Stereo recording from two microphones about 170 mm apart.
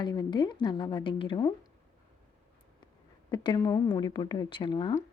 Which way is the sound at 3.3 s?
25° left (ahead or behind).